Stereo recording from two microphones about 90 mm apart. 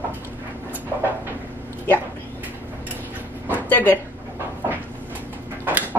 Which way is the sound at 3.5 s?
20° left (ahead or behind).